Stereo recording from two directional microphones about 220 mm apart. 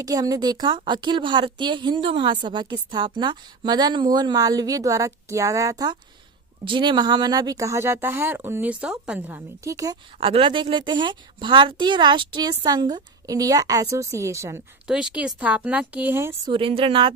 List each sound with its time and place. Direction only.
0.0 s a woman's voice: 15° right (ahead or behind)
16.5 s a woman's voice: 25° right (ahead or behind)